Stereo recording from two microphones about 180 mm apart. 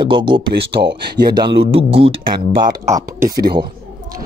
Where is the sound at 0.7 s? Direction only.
65° right (ahead or behind).